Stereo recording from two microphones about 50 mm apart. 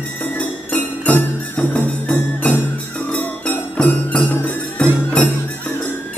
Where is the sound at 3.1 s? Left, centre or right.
Left.